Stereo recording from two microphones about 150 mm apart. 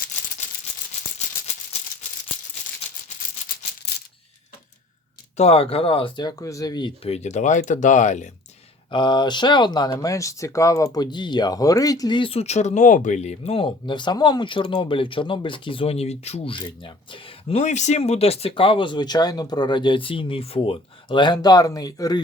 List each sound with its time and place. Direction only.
5.4 s speech: 40° left (ahead or behind)
7.1 s speech: 50° left (ahead or behind)
8.9 s speech: 30° left (ahead or behind)